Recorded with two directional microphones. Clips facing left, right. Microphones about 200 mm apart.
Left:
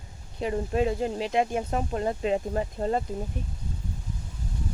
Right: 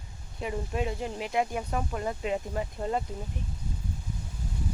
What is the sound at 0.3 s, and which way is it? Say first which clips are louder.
Speech: left 6 dB; 30° left (ahead or behind).